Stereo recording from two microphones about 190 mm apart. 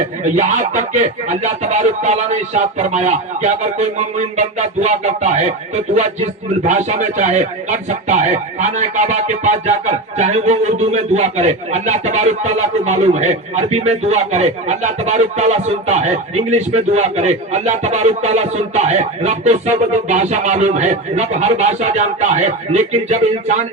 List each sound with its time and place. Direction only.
0.3 s speech: 40° right (ahead or behind)